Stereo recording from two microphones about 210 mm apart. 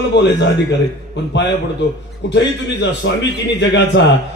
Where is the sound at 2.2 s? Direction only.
55° left (ahead or behind).